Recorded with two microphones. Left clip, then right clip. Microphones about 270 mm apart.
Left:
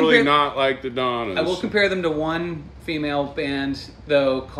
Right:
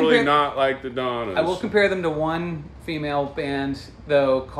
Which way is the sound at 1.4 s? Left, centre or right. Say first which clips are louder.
Right 2 dB; centre.